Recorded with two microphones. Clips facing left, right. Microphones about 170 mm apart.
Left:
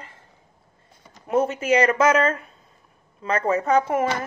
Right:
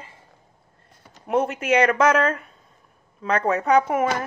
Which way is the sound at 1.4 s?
Centre (ahead or behind).